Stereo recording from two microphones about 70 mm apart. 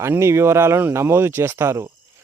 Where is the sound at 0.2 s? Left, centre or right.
Right.